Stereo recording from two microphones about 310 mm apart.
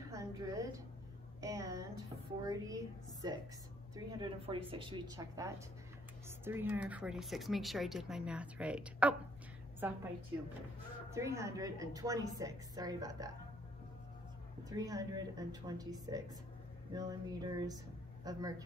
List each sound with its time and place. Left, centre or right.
0.1 s a sound: centre
1.4 s a woman's voice: centre
11.1 s a woman's voice: centre
14.7 s a woman's voice: centre